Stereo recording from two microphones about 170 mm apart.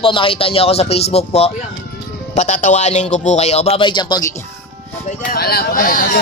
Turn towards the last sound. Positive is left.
turn(degrees=55)  # may be behind; listen again after turning